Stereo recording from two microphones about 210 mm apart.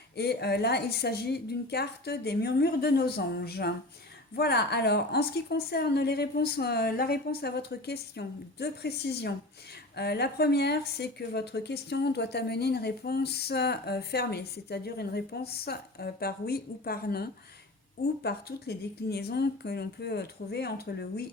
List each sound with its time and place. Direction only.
0.2 s speech: 50° left (ahead or behind)